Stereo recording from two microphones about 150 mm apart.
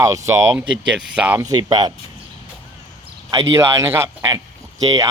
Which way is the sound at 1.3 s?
25° right (ahead or behind).